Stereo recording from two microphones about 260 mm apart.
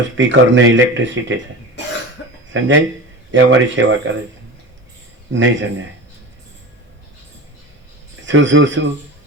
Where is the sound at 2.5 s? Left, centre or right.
Right.